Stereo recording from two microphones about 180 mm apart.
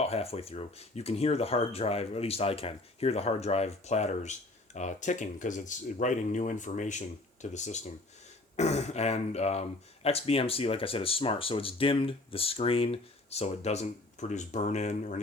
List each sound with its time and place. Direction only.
0.0 s speech: 35° left (ahead or behind)